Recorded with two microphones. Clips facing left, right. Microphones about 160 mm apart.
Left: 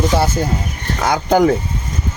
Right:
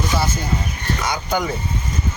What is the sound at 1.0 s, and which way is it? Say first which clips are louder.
Speech: left 11 dB; 90° left.